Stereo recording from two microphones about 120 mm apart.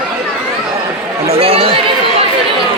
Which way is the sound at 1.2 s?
55° right (ahead or behind).